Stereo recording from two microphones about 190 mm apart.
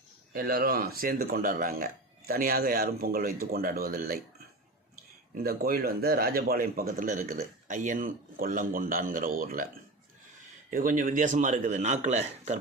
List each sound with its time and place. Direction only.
0.3 s a man's voice: 50° right (ahead or behind)
5.4 s a man's voice: 50° right (ahead or behind)
10.7 s a man's voice: 45° right (ahead or behind)